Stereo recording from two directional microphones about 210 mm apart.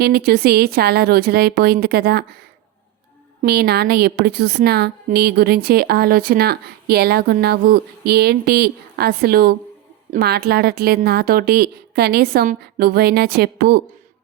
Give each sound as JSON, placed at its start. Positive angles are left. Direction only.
{"t": 0.0, "sound": "a woman's voice", "side_deg": -45}
{"t": 3.4, "sound": "a woman's voice", "side_deg": -50}